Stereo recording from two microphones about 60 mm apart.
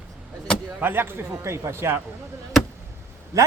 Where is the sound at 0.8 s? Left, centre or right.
Right.